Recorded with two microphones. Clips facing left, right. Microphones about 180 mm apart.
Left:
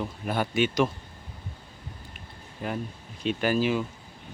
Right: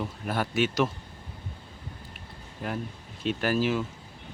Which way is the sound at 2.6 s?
Centre (ahead or behind).